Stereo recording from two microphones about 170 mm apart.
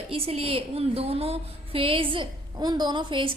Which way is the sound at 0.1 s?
35° right (ahead or behind).